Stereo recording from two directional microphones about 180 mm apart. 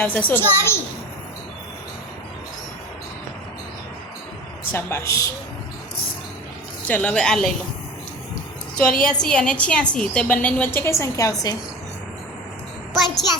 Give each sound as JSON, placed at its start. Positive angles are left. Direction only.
{"t": 0.0, "sound": "a woman's voice", "side_deg": 10}
{"t": 4.7, "sound": "a woman's voice", "side_deg": 15}
{"t": 6.8, "sound": "speech", "side_deg": 5}
{"t": 8.8, "sound": "a woman's voice", "side_deg": 5}